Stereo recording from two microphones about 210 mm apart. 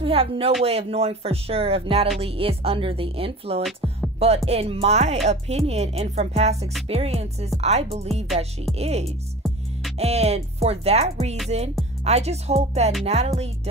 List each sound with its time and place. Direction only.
0.0 s speech: 25° right (ahead or behind)
3.6 s music: centre (ahead or behind)
4.5 s speech: 30° right (ahead or behind)